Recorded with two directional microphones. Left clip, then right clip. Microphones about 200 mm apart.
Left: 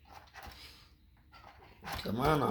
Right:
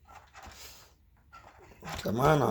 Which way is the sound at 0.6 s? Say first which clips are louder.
Right 3 dB; 55° right (ahead or behind).